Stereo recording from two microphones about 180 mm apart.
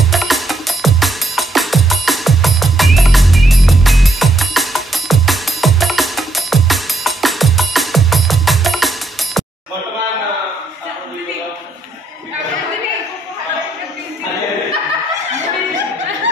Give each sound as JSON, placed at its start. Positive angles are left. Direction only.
{"t": 0.1, "sound": "music", "side_deg": 0}